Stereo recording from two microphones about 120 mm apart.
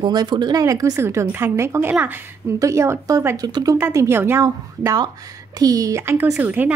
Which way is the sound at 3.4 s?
35° right (ahead or behind).